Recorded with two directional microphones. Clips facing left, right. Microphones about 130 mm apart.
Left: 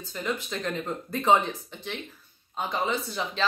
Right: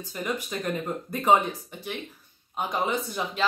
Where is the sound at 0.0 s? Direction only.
10° right (ahead or behind).